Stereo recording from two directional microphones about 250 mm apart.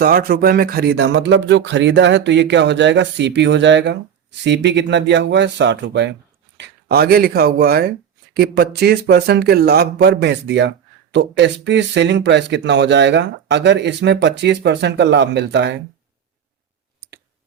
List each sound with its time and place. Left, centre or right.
0.0 s speech: right